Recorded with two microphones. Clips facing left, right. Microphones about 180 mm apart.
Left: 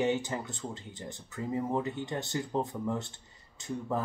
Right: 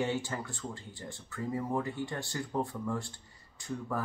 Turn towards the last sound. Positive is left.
turn(degrees=20)  # may be behind; listen again after turning